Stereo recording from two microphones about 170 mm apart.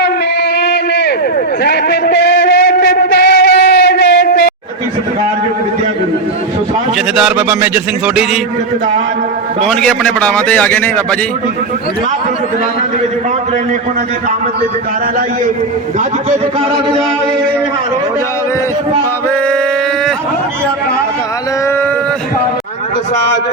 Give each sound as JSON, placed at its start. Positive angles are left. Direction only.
{"t": 0.6, "sound": "a sound", "side_deg": 80}
{"t": 7.2, "sound": "speech", "side_deg": -10}
{"t": 9.6, "sound": "a man's voice", "side_deg": 5}